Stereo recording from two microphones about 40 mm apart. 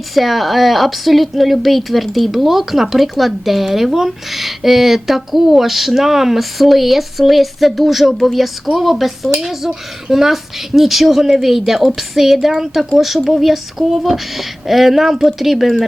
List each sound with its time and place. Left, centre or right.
0.1 s a woman's voice: centre